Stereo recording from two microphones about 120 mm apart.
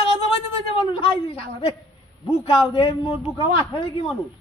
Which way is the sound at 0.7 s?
50° left (ahead or behind).